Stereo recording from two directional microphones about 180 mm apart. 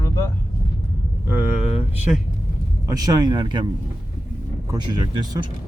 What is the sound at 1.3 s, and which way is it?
Speech, 10° right (ahead or behind).